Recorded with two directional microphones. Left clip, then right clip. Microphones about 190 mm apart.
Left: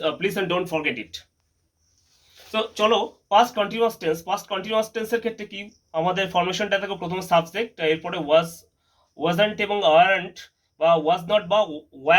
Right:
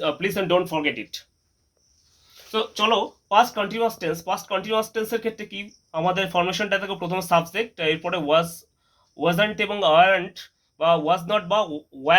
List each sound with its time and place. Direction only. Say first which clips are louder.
0.0 s speech: even; 50° right (ahead or behind)
2.5 s speech: left 1 dB; 50° right (ahead or behind)